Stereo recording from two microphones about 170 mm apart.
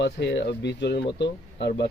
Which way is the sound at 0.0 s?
85° left.